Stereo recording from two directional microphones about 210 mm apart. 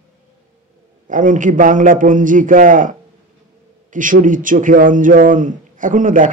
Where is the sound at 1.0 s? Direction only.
40° right (ahead or behind).